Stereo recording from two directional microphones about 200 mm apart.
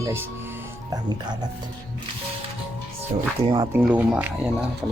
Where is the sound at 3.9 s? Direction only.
5° right (ahead or behind).